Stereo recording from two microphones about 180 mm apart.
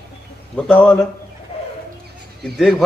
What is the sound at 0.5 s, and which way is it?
Speech, 5° left (ahead or behind).